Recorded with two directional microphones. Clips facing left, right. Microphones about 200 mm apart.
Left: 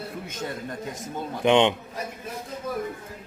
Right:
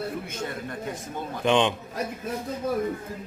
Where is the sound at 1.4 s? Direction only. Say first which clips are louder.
Left 3 dB; 20° left (ahead or behind).